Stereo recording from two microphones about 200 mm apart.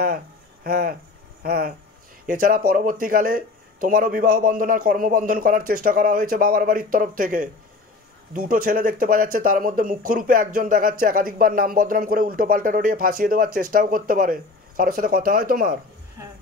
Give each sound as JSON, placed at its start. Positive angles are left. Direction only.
{"t": 0.7, "sound": "speech", "side_deg": -50}